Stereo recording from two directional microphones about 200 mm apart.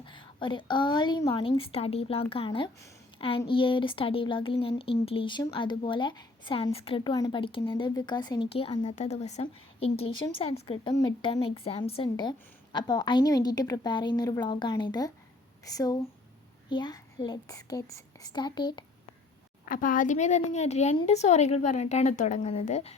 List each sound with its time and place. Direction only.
0.0 s speech: 25° left (ahead or behind)
19.6 s speech: 45° left (ahead or behind)